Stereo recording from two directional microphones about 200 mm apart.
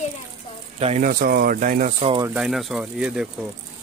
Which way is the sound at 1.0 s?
45° right (ahead or behind).